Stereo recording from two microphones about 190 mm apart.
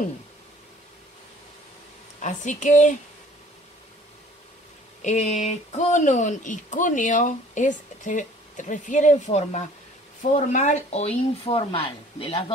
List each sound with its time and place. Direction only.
2.2 s speech: 40° left (ahead or behind)
5.0 s speech: 35° left (ahead or behind)